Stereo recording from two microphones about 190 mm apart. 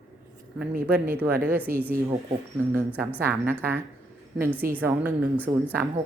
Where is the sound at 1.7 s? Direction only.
50° right (ahead or behind).